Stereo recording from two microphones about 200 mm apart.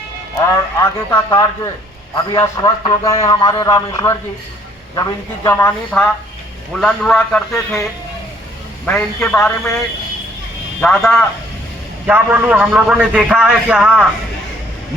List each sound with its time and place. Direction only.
0.3 s a man's voice: 20° left (ahead or behind); by 7.8 s 5° left (ahead or behind)
8.9 s a man's voice: 10° left (ahead or behind)